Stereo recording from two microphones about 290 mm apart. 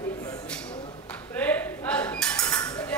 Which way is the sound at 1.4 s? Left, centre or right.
Centre.